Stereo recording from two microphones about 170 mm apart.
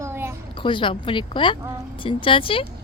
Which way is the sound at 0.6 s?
30° left (ahead or behind).